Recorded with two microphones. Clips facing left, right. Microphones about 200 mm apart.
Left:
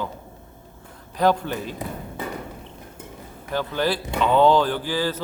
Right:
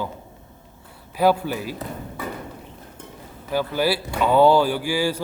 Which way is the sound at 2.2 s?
25° left (ahead or behind).